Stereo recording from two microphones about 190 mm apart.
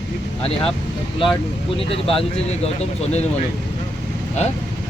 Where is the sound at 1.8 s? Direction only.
30° left (ahead or behind).